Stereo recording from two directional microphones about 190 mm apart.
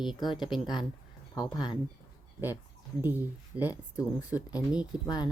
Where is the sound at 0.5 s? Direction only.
25° left (ahead or behind).